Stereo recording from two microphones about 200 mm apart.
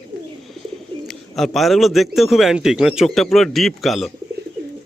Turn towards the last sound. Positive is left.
turn(degrees=0)  # may be behind; listen again after turning